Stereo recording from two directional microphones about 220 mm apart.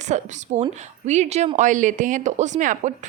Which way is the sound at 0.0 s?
30° right (ahead or behind).